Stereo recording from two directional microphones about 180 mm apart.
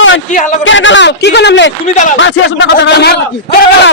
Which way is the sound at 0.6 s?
90° left.